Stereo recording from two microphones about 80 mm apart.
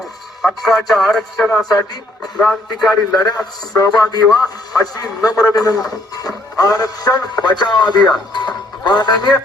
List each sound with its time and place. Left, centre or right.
0.4 s speech: centre
1.6 s a man's voice: left
8.3 s music: left